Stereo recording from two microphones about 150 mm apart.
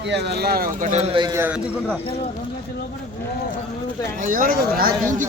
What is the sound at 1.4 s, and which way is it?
Speech, 10° right (ahead or behind).